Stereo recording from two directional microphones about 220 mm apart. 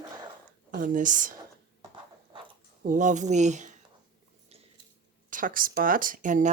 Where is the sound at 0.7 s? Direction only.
35° right (ahead or behind).